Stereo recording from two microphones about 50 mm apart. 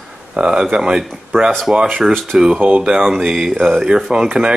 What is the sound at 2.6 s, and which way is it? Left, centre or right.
Speech, right.